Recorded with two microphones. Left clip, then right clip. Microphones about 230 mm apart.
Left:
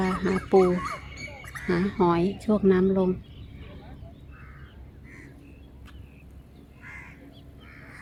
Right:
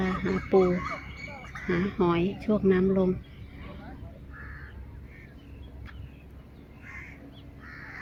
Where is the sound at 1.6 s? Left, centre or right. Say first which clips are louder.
Left 3 dB; centre.